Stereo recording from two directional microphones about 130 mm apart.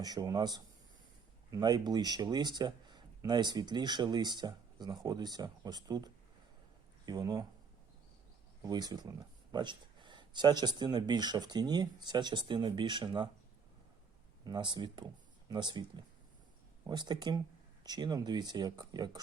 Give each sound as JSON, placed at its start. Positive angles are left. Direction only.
{"t": 0.0, "sound": "speech", "side_deg": -30}
{"t": 8.6, "sound": "speech", "side_deg": -30}
{"t": 14.4, "sound": "speech", "side_deg": -35}